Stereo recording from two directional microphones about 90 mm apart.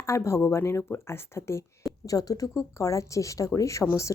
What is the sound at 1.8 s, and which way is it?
Speech, 40° left (ahead or behind).